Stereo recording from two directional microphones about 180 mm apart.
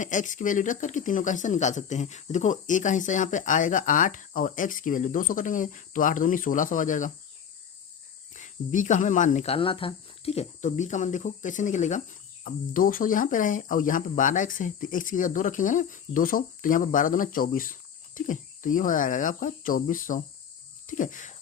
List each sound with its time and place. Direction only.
0.0 s speech: 45° left (ahead or behind)
8.3 s speech: 45° left (ahead or behind)
20.8 s cricket: 45° left (ahead or behind)